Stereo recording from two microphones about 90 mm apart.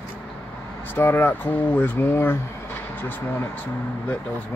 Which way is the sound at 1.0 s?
25° left (ahead or behind).